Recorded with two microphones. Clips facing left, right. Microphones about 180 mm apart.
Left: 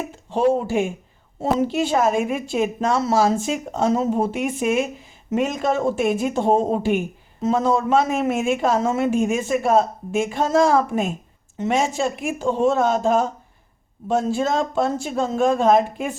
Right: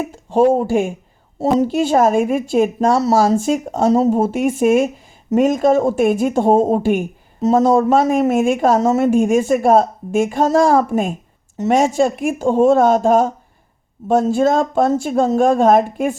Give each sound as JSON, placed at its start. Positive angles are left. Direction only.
{"t": 0.3, "sound": "speech", "side_deg": -45}